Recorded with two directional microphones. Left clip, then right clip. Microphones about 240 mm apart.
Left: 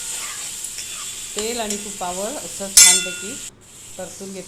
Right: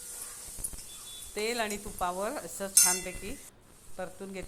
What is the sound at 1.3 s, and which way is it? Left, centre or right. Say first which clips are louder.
Stir: left 6 dB; centre.